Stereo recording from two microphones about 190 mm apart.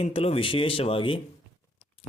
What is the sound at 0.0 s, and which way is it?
A man's voice, 30° left (ahead or behind).